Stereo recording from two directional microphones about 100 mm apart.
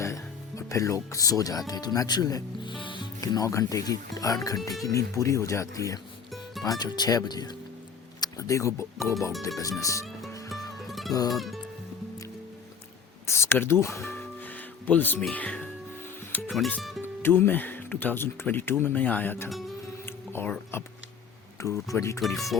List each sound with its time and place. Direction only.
0.0 s speech: 30° left (ahead or behind)
2.6 s music: 55° left (ahead or behind)
3.2 s speech: 35° left (ahead or behind)
6.3 s music: centre (ahead or behind)
6.7 s speech: 45° left (ahead or behind)
10.8 s music: centre (ahead or behind)
13.2 s speech: 25° left (ahead or behind)
13.8 s music: 25° left (ahead or behind)
15.3 s speech: 15° left (ahead or behind)
19.5 s music: centre (ahead or behind)
20.1 s music: 25° left (ahead or behind)
20.7 s speech: 25° left (ahead or behind)